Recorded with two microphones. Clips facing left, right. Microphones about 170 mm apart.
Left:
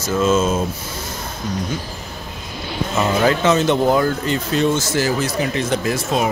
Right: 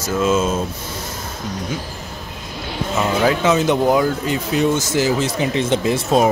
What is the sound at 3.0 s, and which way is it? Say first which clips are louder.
Speech: left 1 dB; 5° right (ahead or behind).